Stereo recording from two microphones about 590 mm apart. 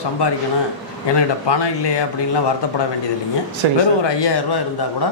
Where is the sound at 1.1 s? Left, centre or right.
Left.